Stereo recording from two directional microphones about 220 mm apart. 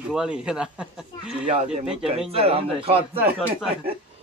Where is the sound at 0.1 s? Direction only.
5° right (ahead or behind).